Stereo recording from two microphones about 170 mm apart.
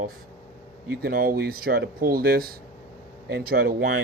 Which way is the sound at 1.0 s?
60° right (ahead or behind).